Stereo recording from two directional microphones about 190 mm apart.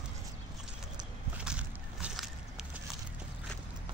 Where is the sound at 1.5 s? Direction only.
5° right (ahead or behind).